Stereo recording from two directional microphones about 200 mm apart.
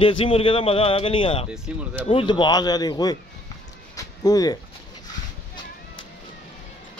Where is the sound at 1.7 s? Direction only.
5° right (ahead or behind).